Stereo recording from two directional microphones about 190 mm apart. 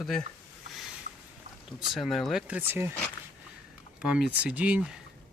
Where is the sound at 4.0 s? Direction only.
5° right (ahead or behind).